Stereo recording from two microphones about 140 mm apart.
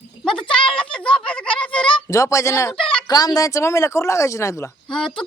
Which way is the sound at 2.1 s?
25° left (ahead or behind).